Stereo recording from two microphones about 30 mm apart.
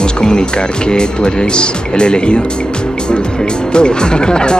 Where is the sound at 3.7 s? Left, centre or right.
Left.